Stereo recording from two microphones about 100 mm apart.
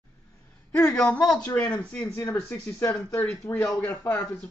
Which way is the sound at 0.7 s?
25° left (ahead or behind).